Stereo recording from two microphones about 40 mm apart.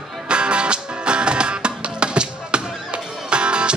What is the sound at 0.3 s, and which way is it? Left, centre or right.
Music, right.